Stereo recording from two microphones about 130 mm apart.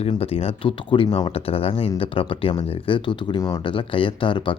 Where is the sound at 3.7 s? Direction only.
40° left (ahead or behind).